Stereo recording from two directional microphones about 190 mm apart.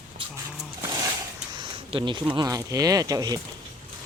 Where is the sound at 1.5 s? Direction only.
25° right (ahead or behind).